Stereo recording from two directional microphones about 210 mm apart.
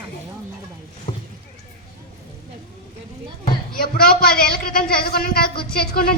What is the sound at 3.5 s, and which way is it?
Speech, 45° left (ahead or behind).